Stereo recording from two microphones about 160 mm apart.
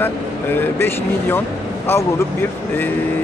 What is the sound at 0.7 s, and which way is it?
Speech, 15° left (ahead or behind).